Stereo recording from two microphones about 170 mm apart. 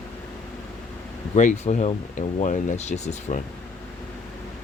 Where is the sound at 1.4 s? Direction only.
45° left (ahead or behind).